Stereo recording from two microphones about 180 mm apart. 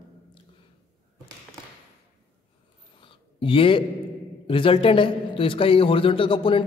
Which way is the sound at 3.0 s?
30° left (ahead or behind).